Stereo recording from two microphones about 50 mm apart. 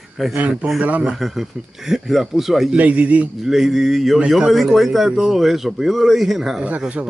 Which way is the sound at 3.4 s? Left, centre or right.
Centre.